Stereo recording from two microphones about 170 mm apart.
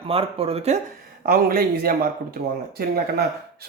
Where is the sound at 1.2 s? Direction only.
60° right (ahead or behind).